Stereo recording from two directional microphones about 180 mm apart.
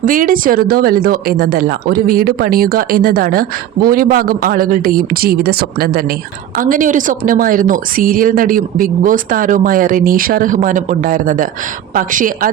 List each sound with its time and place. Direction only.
0.0 s a woman's voice: 50° right (ahead or behind)
6.6 s a woman's voice: 50° right (ahead or behind)